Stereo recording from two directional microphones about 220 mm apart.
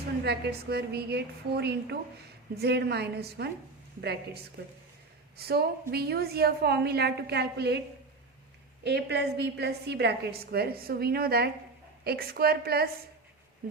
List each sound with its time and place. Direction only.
0.3 s a woman's voice: 50° right (ahead or behind)
8.8 s a woman's voice: 50° right (ahead or behind)